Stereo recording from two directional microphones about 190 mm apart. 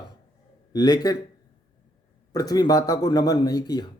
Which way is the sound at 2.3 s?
20° left (ahead or behind).